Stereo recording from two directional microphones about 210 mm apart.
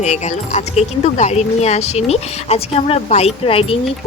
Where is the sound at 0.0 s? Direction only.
35° left (ahead or behind).